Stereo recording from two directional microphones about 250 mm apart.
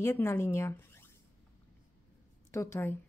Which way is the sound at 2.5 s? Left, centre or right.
Centre.